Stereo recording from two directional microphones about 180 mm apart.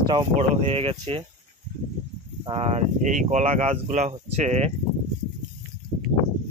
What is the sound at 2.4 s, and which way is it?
Speech, 30° right (ahead or behind).